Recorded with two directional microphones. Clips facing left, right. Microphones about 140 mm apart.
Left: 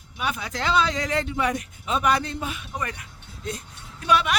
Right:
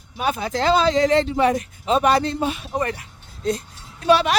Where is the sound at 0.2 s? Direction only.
35° right (ahead or behind).